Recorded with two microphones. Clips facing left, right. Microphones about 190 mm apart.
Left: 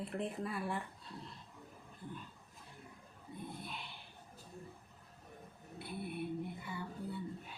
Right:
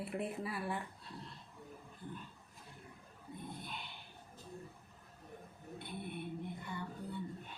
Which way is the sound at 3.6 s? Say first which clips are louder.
Left 1 dB; centre (ahead or behind).